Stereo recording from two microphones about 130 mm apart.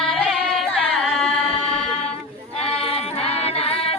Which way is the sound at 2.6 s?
50° left (ahead or behind).